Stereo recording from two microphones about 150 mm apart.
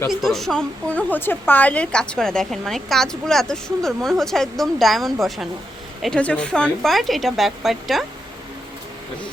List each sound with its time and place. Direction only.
0.1 s a woman's voice: centre (ahead or behind)